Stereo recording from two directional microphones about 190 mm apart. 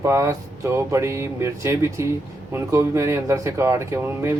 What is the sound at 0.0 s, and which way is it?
Speech, 15° right (ahead or behind).